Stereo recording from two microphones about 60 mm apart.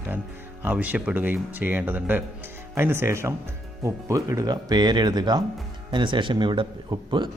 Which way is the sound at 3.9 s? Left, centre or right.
Right.